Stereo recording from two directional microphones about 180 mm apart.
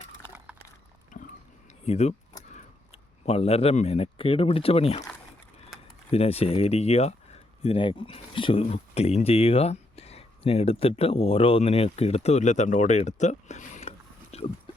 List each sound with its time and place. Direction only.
1.1 s pig: 45° left (ahead or behind)
1.8 s speech: 35° left (ahead or behind)
6.1 s speech: 35° left (ahead or behind)